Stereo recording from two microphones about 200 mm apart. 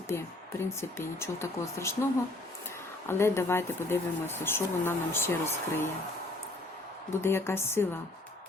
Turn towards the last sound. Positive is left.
turn(degrees=10)  # may be behind; listen again after turning